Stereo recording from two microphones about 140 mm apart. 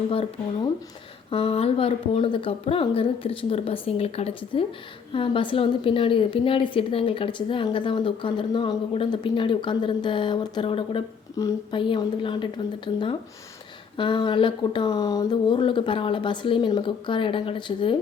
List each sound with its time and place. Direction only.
1.3 s a woman's voice: 40° left (ahead or behind)
11.4 s a woman's voice: 25° left (ahead or behind)